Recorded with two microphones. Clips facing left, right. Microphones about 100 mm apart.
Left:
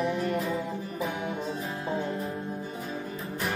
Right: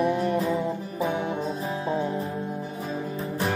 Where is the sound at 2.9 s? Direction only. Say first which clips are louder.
Right 5 dB; 35° right (ahead or behind).